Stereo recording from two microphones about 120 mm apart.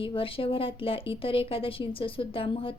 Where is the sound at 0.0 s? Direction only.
45° left (ahead or behind).